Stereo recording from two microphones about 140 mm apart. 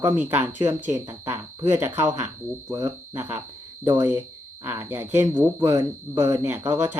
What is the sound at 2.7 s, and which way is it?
Speech, 35° right (ahead or behind).